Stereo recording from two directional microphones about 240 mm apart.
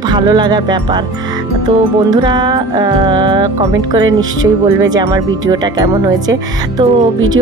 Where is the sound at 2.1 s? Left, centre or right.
Centre.